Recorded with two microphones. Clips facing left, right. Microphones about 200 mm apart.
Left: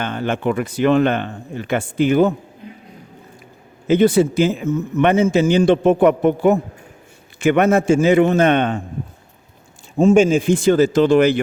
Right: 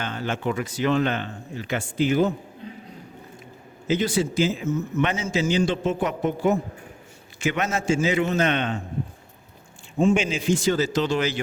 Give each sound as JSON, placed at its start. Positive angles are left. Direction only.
{"t": 0.0, "sound": "a man's voice", "side_deg": 60}
{"t": 3.8, "sound": "a man's voice", "side_deg": 60}
{"t": 10.0, "sound": "a man's voice", "side_deg": 45}